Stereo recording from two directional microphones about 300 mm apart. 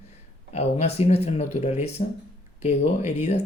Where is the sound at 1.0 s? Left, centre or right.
Centre.